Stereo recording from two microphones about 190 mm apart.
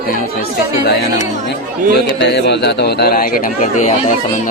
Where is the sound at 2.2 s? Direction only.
65° left (ahead or behind); by 3.9 s 45° left (ahead or behind).